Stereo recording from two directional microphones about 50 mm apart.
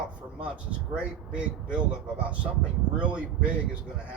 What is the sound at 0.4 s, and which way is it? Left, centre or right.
A man's voice, right.